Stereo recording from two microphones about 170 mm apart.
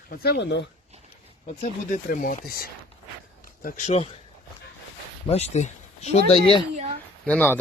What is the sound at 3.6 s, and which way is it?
Speech, 40° left (ahead or behind).